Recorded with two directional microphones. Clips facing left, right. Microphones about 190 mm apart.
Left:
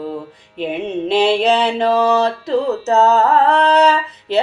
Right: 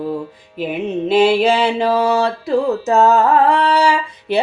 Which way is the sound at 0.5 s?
5° right (ahead or behind).